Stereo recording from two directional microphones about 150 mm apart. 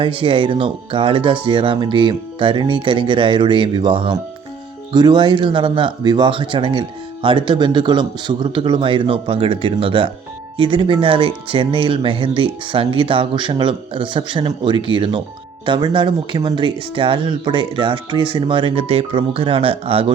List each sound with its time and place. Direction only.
0.0 s speech: 35° right (ahead or behind)